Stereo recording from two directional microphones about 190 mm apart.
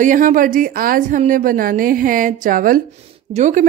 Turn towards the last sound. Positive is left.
turn(degrees=-40)  # may be behind; listen again after turning